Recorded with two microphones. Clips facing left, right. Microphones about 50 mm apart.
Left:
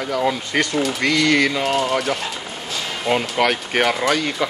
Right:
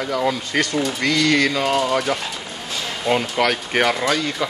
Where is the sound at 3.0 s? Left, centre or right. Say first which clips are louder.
Even; centre.